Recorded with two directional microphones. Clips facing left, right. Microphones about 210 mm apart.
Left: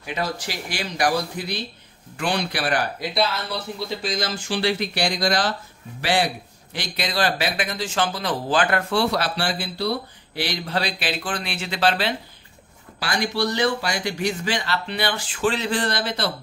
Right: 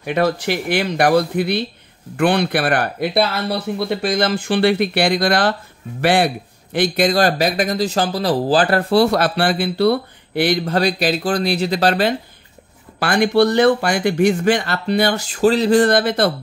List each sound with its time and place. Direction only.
0.0 s speech: 60° right (ahead or behind); by 12.2 s 45° right (ahead or behind)
13.0 s speech: 55° right (ahead or behind)